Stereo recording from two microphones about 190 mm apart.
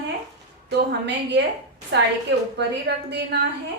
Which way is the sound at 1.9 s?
70° right (ahead or behind).